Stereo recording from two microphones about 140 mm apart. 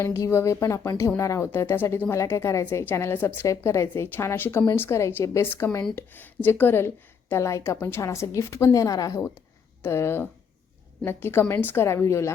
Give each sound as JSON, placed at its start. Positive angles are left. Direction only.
{"t": 0.0, "sound": "a woman's voice", "side_deg": 20}